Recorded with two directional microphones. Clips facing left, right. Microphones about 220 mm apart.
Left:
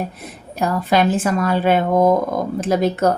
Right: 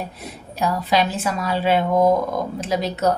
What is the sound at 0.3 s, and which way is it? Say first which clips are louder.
Speech: even; 50° left (ahead or behind).